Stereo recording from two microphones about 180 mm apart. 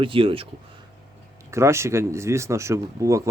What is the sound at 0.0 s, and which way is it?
Speech, 30° right (ahead or behind).